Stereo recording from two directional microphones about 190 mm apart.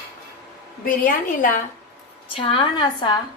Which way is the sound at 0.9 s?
45° left (ahead or behind).